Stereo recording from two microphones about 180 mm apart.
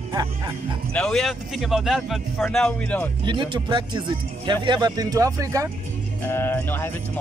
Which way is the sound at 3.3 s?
25° right (ahead or behind).